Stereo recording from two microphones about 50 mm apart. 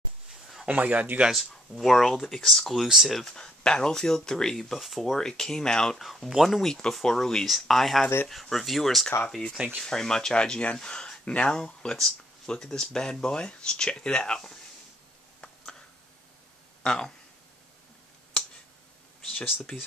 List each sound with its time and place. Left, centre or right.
0.7 s speech: right
1.3 s speech: centre
5.9 s speech: centre
6.7 s speech: centre
9.8 s speech: centre
16.8 s speech: centre
19.7 s speech: centre